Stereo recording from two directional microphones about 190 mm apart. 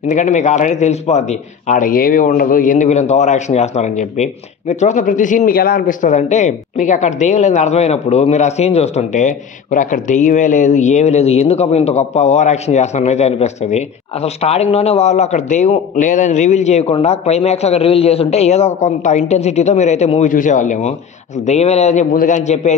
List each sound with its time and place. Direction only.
0.1 s a man's voice: 40° left (ahead or behind)